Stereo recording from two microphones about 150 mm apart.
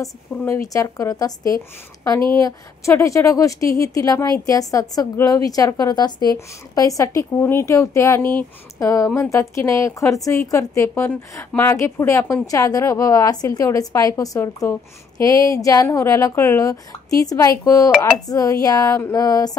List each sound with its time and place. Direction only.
0.0 s a woman's voice: 20° left (ahead or behind)